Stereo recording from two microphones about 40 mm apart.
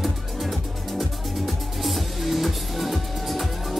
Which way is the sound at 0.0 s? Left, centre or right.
Centre.